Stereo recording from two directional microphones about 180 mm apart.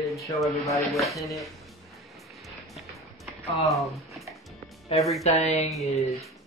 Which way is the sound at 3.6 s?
Centre (ahead or behind).